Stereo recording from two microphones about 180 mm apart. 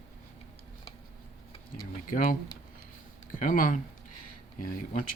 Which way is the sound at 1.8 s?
50° left (ahead or behind).